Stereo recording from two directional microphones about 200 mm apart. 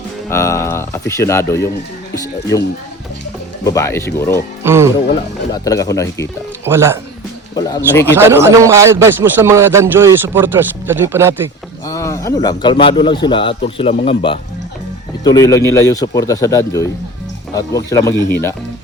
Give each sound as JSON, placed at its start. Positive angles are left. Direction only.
{"t": 0.3, "sound": "speech", "side_deg": 15}
{"t": 4.6, "sound": "speech", "side_deg": -10}
{"t": 5.6, "sound": "speech", "side_deg": 15}
{"t": 6.7, "sound": "speech", "side_deg": -10}
{"t": 7.5, "sound": "speech", "side_deg": 20}
{"t": 8.0, "sound": "speech", "side_deg": -10}
{"t": 11.9, "sound": "speech", "side_deg": 15}